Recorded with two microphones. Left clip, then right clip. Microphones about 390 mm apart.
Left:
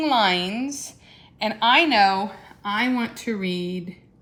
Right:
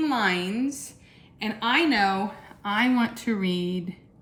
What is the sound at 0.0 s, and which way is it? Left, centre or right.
A woman's voice, centre.